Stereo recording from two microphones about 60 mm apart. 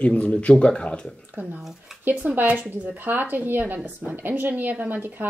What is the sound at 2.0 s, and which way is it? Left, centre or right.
Speech, right.